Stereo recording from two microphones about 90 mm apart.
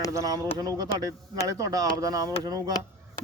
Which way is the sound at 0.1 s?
40° right (ahead or behind).